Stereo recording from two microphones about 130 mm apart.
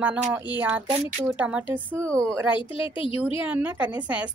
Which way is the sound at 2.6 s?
40° left (ahead or behind).